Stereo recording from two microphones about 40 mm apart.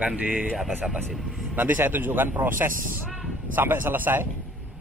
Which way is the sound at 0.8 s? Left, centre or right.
Centre.